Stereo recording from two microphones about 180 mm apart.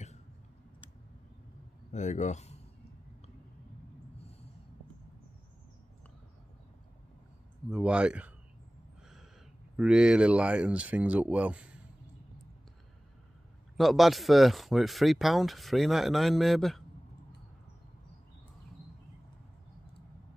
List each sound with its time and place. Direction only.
1.9 s speech: 40° left (ahead or behind)
7.7 s speech: 5° right (ahead or behind)
9.8 s speech: 5° right (ahead or behind)
13.7 s speech: centre (ahead or behind)